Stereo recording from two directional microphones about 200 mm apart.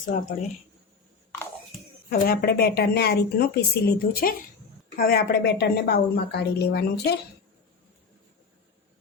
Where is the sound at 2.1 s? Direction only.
50° left (ahead or behind).